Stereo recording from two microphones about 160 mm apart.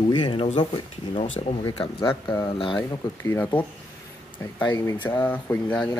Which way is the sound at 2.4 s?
30° left (ahead or behind).